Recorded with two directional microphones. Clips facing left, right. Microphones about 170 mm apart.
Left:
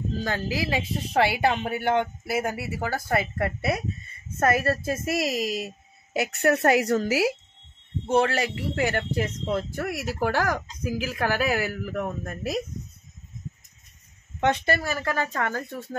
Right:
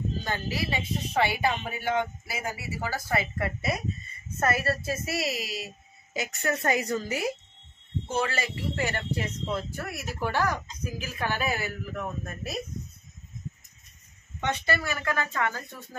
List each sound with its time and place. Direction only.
0.2 s a woman's voice: 90° left; by 5.7 s 45° left (ahead or behind)
6.1 s a woman's voice: 65° left (ahead or behind); by 7.3 s 90° left
8.1 s speech: 70° left (ahead or behind)
10.2 s speech: 90° left; by 12.5 s 75° left (ahead or behind)
14.4 s speech: 55° left (ahead or behind)
14.8 s a woman's voice: 35° left (ahead or behind)